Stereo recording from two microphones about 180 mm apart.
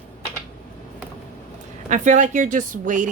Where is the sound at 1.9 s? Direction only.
45° right (ahead or behind).